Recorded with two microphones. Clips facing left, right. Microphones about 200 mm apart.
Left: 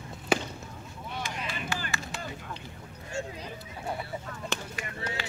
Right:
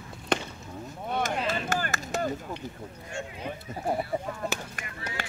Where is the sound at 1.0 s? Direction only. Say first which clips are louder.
Right 8 dB; 55° right (ahead or behind).